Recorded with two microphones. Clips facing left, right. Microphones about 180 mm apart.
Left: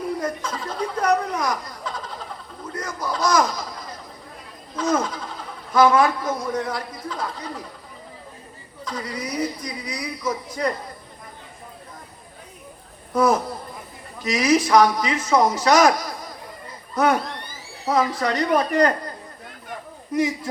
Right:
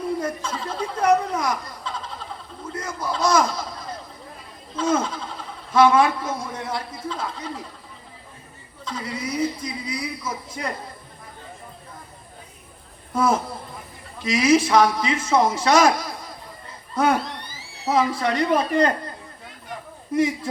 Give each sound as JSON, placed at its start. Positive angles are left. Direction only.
{"t": 0.2, "sound": "a sound", "side_deg": -25}
{"t": 4.8, "sound": "speech", "side_deg": -25}
{"t": 8.8, "sound": "speech", "side_deg": -25}
{"t": 13.1, "sound": "speech", "side_deg": -25}
{"t": 20.1, "sound": "speech", "side_deg": -25}